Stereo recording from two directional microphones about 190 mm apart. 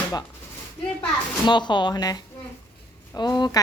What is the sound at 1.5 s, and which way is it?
A woman's voice, 25° left (ahead or behind).